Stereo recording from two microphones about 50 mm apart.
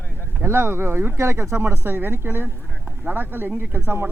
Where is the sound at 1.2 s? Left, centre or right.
Right.